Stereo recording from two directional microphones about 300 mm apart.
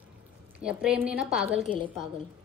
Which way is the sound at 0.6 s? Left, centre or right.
Centre.